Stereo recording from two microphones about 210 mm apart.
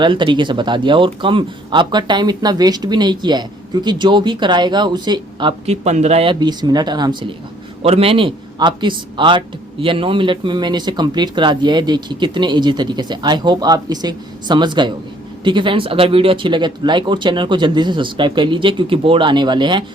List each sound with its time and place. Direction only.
0.0 s speech: 25° right (ahead or behind)